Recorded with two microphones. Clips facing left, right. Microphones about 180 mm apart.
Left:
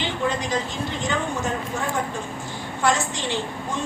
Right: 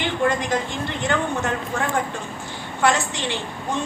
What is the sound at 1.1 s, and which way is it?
Speech, 60° right (ahead or behind).